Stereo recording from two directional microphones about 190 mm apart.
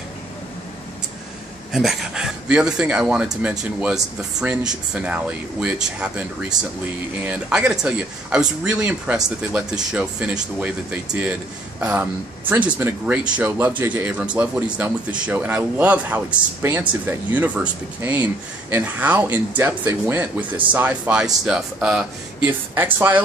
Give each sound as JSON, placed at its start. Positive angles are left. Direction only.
{"t": 1.7, "sound": "speech", "side_deg": 0}
{"t": 7.2, "sound": "speech", "side_deg": -5}